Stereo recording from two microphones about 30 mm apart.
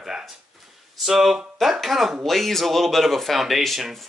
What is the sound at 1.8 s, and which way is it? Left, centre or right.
Speech, centre.